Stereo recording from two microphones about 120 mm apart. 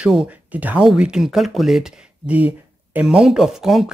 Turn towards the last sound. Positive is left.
turn(degrees=-5)  # may be behind; listen again after turning